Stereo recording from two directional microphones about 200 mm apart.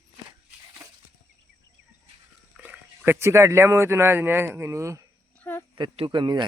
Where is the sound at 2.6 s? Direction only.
10° right (ahead or behind).